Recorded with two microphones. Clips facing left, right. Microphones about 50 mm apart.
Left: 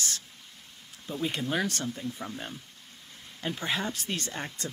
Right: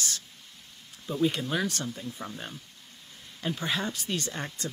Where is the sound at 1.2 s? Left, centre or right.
Left.